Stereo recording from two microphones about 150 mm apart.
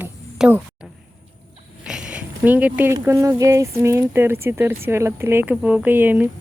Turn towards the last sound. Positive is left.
turn(degrees=-10)  # may be behind; listen again after turning